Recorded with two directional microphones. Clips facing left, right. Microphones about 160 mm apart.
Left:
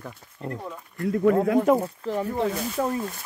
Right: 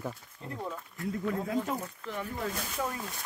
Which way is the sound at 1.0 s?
70° left (ahead or behind).